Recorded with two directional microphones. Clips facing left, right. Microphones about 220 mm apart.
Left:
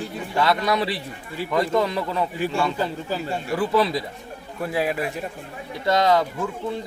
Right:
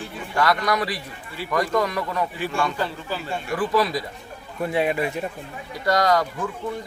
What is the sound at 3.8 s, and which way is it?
Speech, 25° left (ahead or behind).